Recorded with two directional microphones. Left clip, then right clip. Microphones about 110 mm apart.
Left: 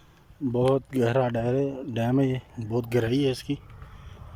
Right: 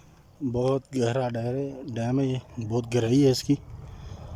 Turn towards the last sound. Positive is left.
turn(degrees=-40)  # may be behind; listen again after turning